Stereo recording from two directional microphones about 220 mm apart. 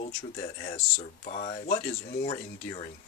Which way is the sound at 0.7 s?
35° left (ahead or behind).